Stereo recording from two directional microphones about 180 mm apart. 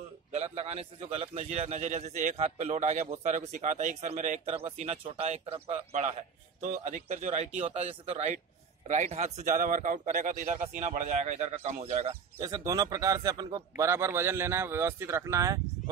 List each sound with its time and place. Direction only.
0.3 s a man's voice: 35° right (ahead or behind)
12.4 s speech: 20° right (ahead or behind)